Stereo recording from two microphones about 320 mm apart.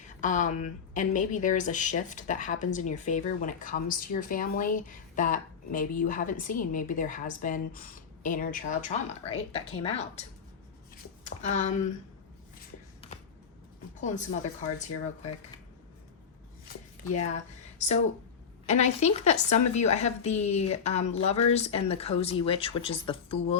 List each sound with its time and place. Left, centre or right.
0.2 s speech: left
11.3 s speech: left
13.0 s a sound: centre
14.8 s speech: left
17.1 s speech: left
18.6 s speech: left